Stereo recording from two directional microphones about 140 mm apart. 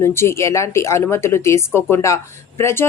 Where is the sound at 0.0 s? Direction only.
20° left (ahead or behind).